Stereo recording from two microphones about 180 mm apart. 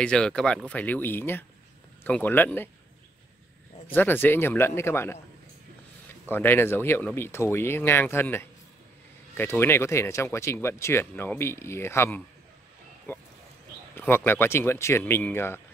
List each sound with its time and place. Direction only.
0.0 s speech: 5° left (ahead or behind)
3.9 s speech: 10° left (ahead or behind)
6.3 s speech: 10° left (ahead or behind)
13.1 s a sound: 10° left (ahead or behind)
13.9 s speech: 10° left (ahead or behind)